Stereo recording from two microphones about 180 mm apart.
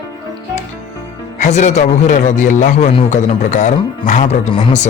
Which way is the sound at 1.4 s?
40° left (ahead or behind).